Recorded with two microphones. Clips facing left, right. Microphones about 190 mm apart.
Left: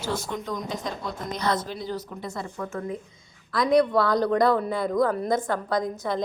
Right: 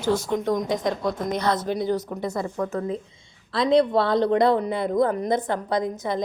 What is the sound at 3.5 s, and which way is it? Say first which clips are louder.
A woman's voice: right 1 dB; 25° right (ahead or behind).